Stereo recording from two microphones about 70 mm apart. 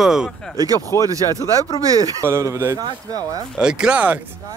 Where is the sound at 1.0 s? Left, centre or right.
Right.